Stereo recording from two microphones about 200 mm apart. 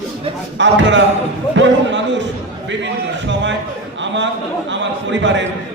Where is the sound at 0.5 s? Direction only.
65° right (ahead or behind).